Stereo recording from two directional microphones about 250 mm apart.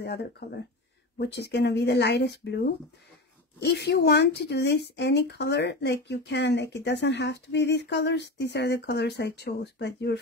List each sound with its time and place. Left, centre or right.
0.0 s speech: left